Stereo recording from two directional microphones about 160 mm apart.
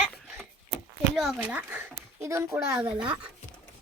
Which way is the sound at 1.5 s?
15° right (ahead or behind).